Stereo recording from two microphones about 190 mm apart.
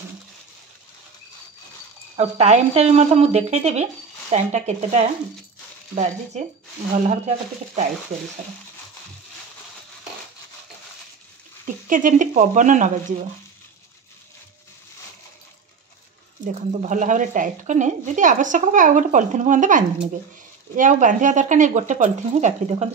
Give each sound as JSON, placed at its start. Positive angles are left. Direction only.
{"t": 2.1, "sound": "a woman's voice", "side_deg": -35}
{"t": 7.2, "sound": "a woman's voice", "side_deg": -40}
{"t": 11.6, "sound": "a woman's voice", "side_deg": -45}
{"t": 16.4, "sound": "a woman's voice", "side_deg": -40}